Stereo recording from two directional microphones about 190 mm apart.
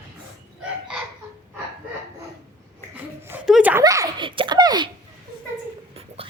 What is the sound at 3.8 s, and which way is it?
Giggle, 20° right (ahead or behind).